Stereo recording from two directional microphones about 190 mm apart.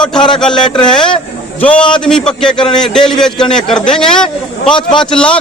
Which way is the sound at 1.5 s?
5° left (ahead or behind).